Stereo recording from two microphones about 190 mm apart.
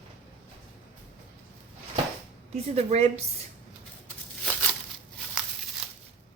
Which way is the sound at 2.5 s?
35° right (ahead or behind).